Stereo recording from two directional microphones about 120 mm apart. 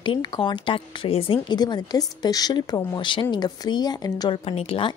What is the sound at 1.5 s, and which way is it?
A woman's voice, 35° left (ahead or behind).